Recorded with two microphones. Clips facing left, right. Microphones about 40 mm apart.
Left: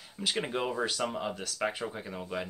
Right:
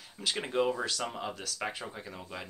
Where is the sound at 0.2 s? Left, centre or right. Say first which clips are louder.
Right 1 dB; centre.